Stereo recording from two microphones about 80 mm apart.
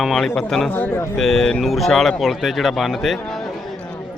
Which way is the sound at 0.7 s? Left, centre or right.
Left.